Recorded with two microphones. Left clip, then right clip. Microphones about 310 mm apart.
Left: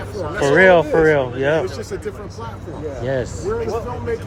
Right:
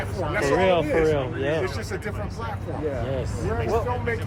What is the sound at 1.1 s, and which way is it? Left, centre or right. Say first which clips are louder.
Speech: left 8 dB; left.